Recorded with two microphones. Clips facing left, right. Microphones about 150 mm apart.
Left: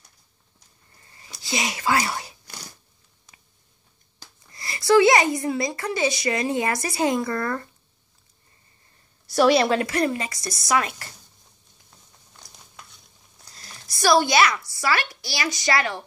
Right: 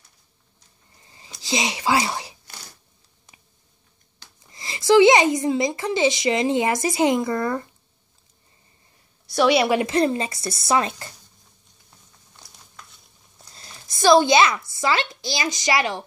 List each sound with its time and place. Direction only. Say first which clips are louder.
1.0 s a sound: right 2 dB; 20° right (ahead or behind)
1.5 s speech: right 2 dB; 15° right (ahead or behind)
4.4 s a woman's voice: even; 20° right (ahead or behind)
9.3 s a woman's voice: left 1 dB; centre (ahead or behind)
9.6 s speech: right 1 dB; 15° right (ahead or behind)
9.8 s a woman's voice: right 3 dB; 25° right (ahead or behind)
13.6 s a sound: right 2 dB; 20° right (ahead or behind)
14.7 s a woman's voice: right 2 dB; 20° right (ahead or behind)